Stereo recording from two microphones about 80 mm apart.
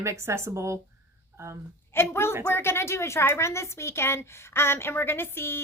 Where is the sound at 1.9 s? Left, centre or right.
Left.